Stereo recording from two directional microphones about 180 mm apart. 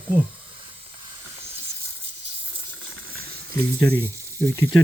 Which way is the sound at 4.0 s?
15° right (ahead or behind).